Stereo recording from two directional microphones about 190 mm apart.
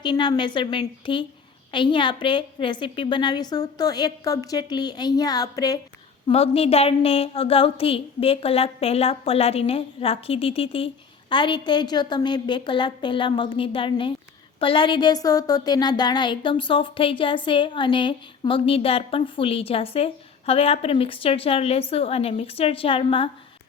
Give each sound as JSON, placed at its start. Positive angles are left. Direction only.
{"t": 0.0, "sound": "a woman's voice", "side_deg": 25}
{"t": 6.2, "sound": "a woman's voice", "side_deg": 30}